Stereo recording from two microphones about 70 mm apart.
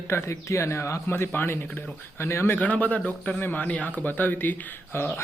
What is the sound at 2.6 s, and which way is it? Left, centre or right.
Speech, left.